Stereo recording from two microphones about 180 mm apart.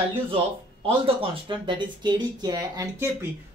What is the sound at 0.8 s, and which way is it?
Speech, 30° right (ahead or behind).